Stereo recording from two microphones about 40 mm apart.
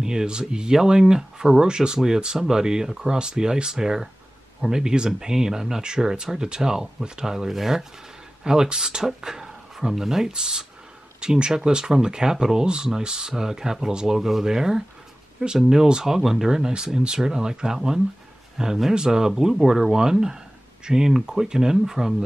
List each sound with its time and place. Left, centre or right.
0.0 s speech: centre